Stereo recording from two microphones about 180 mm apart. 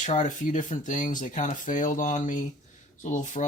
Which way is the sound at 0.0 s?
45° left (ahead or behind).